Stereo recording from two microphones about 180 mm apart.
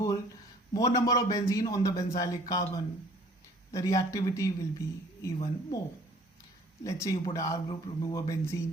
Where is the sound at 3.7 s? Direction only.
20° left (ahead or behind).